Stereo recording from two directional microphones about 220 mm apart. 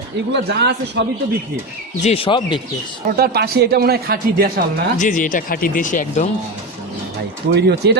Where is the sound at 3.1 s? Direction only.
45° right (ahead or behind).